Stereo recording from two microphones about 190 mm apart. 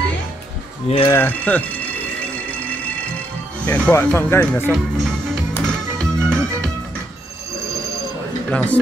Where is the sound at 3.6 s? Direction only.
10° left (ahead or behind).